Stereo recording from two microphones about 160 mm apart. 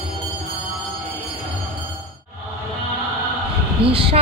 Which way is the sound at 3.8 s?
90° right.